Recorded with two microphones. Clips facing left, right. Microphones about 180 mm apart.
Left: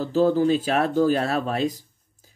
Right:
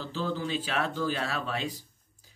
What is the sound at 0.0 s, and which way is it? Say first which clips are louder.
Speech: left 13 dB; 45° left (ahead or behind).